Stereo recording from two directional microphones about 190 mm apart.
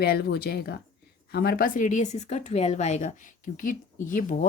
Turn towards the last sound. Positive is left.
turn(degrees=45)  # may be behind; listen again after turning